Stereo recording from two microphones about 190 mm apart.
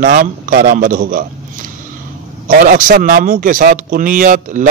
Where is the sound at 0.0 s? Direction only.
45° right (ahead or behind).